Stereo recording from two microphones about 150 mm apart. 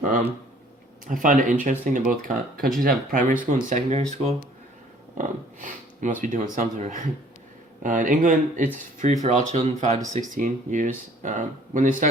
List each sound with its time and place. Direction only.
1.0 s speech: 65° right (ahead or behind)
5.1 s speech: 60° right (ahead or behind)
7.8 s speech: 65° right (ahead or behind); by 10.0 s 45° right (ahead or behind)
10.1 s speech: 55° right (ahead or behind)